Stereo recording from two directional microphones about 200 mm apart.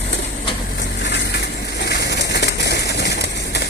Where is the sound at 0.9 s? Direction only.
60° left (ahead or behind).